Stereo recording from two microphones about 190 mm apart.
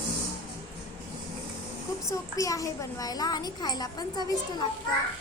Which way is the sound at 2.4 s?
15° left (ahead or behind).